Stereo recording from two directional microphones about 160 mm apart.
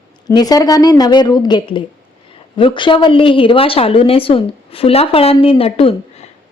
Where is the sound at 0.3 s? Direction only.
25° left (ahead or behind).